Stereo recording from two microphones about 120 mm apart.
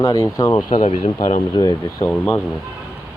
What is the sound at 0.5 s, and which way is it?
Speech, 40° left (ahead or behind).